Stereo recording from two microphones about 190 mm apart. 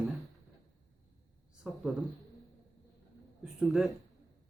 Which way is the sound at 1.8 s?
Centre (ahead or behind).